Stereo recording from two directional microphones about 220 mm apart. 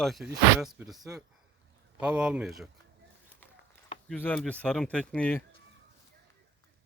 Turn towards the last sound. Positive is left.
turn(degrees=5)  # may be behind; listen again after turning